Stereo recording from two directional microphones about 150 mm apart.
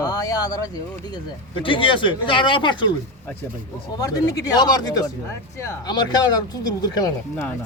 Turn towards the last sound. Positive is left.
turn(degrees=25)  # may be behind; listen again after turning